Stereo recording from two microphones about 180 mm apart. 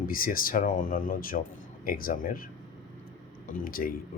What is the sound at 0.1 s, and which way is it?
Speech, 50° left (ahead or behind).